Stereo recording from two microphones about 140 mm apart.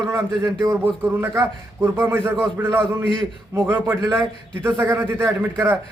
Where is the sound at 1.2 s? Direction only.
20° right (ahead or behind).